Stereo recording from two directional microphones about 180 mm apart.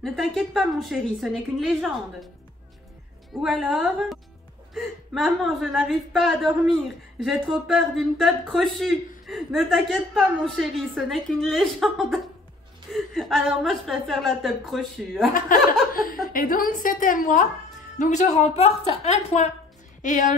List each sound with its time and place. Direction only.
0.0 s a woman's voice: centre (ahead or behind)
3.4 s a woman's voice: centre (ahead or behind)
15.3 s a woman's voice: 50° left (ahead or behind)